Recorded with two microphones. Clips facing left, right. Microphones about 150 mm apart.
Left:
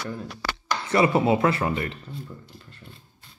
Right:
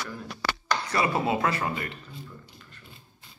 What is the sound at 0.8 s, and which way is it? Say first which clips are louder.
Speech: left 7 dB; 25° left (ahead or behind).